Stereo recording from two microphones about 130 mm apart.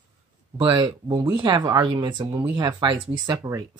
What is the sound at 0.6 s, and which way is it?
Speech, 40° right (ahead or behind).